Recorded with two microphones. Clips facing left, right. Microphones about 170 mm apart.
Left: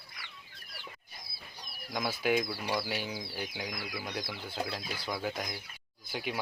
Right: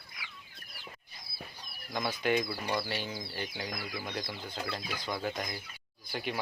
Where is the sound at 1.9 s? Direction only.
10° left (ahead or behind).